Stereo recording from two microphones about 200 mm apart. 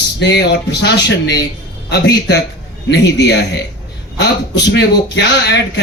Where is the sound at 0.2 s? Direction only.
60° left (ahead or behind).